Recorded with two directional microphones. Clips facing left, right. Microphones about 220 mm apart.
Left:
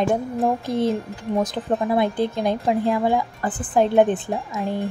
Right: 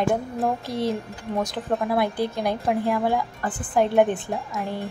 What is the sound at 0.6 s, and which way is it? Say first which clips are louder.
Speech: left 4 dB; 50° left (ahead or behind).